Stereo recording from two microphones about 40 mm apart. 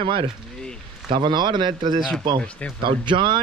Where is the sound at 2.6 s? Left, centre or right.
Left.